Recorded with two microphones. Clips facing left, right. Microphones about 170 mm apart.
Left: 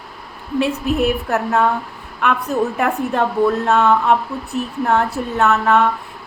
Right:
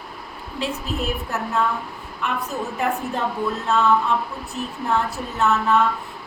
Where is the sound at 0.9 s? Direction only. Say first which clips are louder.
Left 9 dB; 60° left (ahead or behind).